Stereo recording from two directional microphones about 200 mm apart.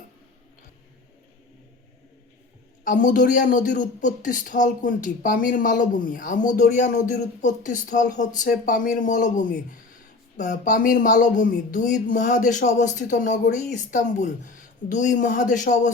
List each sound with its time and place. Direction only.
2.8 s speech: 40° left (ahead or behind)